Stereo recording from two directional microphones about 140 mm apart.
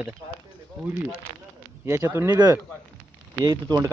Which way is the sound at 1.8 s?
15° right (ahead or behind).